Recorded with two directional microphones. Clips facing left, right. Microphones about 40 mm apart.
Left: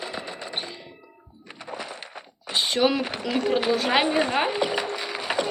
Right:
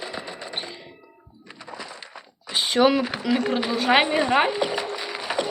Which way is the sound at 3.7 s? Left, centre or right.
Centre.